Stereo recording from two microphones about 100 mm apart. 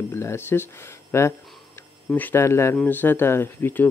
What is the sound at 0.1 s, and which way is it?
Speech, 25° left (ahead or behind).